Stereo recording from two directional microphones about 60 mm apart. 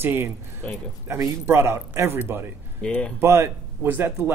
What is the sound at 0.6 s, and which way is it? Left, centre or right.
Speech, centre.